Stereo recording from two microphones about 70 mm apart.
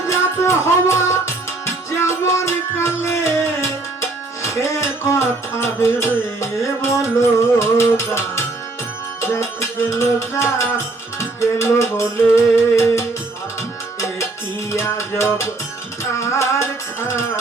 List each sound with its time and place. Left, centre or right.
0.1 s music: left
14.7 s music: left